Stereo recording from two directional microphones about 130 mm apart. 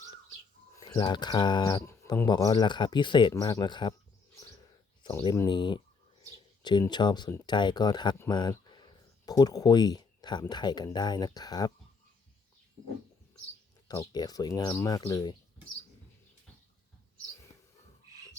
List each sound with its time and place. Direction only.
0.8 s speech: 35° left (ahead or behind)
5.0 s speech: 35° left (ahead or behind)
8.3 s a sound: 35° left (ahead or behind)
10.5 s speech: 35° left (ahead or behind)
13.8 s speech: 25° left (ahead or behind)